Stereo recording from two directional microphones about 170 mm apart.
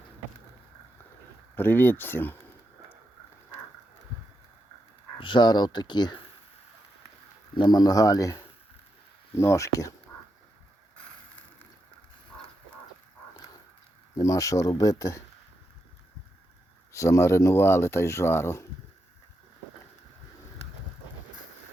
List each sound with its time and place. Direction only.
1.5 s speech: 10° left (ahead or behind)
5.2 s speech: 25° left (ahead or behind)
7.5 s speech: 25° left (ahead or behind)
14.2 s speech: 20° left (ahead or behind)
16.9 s speech: 20° left (ahead or behind)